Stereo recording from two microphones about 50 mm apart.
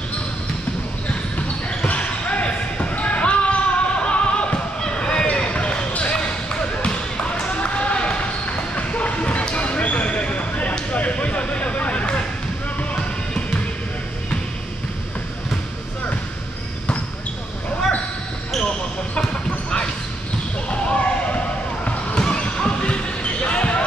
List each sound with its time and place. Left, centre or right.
1.9 s basketball bounce: left
10.9 s a sound: left
20.9 s basketball bounce: left